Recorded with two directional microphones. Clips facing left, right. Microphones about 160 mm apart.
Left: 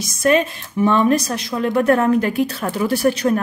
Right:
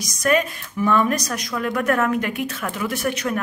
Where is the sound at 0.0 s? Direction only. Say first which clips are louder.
Left 4 dB; 25° left (ahead or behind).